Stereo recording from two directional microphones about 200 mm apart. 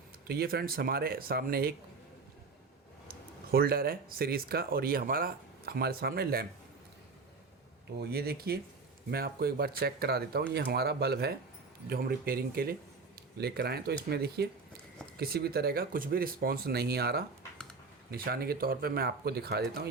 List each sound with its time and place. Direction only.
0.3 s speech: 50° right (ahead or behind)
3.5 s speech: 50° right (ahead or behind)
8.1 s speech: 50° right (ahead or behind)